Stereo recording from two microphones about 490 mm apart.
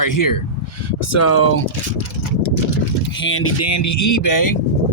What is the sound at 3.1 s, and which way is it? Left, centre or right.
Speech, left.